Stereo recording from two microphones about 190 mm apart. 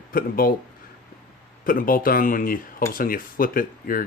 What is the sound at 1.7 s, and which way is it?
Speech, 50° left (ahead or behind).